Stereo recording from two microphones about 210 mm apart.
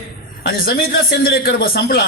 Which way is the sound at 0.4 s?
45° left (ahead or behind).